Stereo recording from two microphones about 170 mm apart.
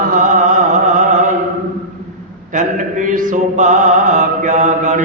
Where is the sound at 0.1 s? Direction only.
50° right (ahead or behind).